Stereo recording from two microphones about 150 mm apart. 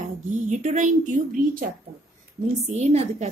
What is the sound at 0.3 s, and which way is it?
A woman's voice, 55° right (ahead or behind).